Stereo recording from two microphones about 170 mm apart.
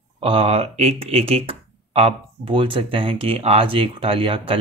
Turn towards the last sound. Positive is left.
turn(degrees=-35)  # may be behind; listen again after turning